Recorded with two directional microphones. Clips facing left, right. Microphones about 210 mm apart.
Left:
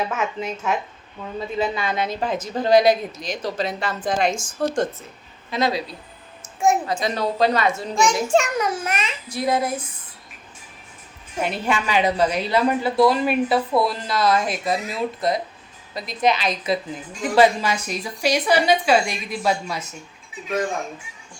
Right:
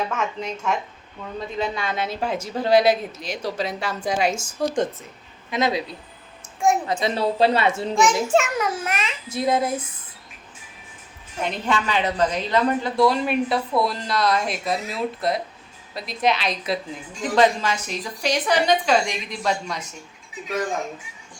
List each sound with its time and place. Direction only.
0.1 s a woman's voice: 5° left (ahead or behind)
5.5 s speech: 20° right (ahead or behind)
6.8 s speech: 25° right (ahead or behind)
8.3 s a woman's voice: 5° right (ahead or behind)
9.3 s speech: 25° right (ahead or behind)
11.3 s a woman's voice: 10° left (ahead or behind)